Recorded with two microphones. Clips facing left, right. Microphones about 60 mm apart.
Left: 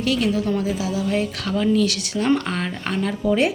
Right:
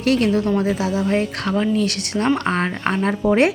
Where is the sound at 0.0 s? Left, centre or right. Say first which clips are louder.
Right 3 dB; right.